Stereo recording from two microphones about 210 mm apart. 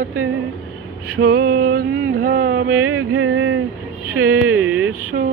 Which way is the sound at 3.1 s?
80° right.